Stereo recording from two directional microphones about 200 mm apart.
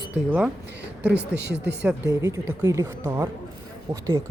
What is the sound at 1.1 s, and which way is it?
Speech, 60° right (ahead or behind).